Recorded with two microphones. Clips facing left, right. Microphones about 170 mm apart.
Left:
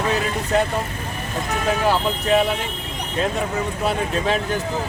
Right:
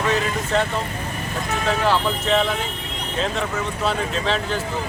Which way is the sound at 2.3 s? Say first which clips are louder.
Left 2 dB; 10° left (ahead or behind).